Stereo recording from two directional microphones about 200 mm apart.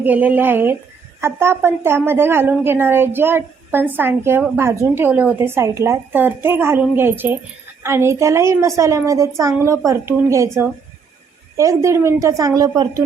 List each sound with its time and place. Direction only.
0.0 s a woman's voice: 10° right (ahead or behind)